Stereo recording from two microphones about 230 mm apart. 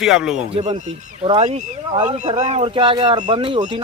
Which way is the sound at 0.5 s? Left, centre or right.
Right.